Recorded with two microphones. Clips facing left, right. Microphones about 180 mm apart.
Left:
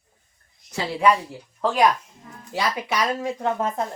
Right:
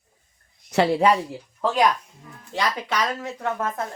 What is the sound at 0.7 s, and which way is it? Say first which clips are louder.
Speech: right 9 dB; 70° right (ahead or behind).